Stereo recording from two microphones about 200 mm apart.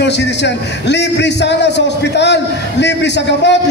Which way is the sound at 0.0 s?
60° left (ahead or behind).